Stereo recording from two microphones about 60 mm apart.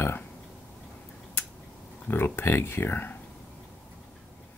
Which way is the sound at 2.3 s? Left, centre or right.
Left.